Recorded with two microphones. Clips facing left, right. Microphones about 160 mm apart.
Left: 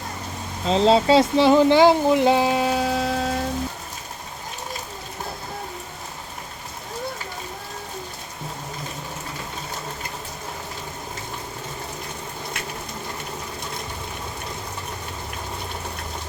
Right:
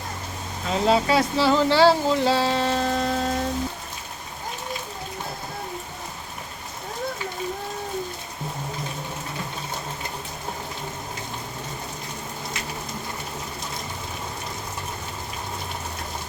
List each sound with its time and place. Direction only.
0.7 s speech: 25° left (ahead or behind); by 3.4 s centre (ahead or behind)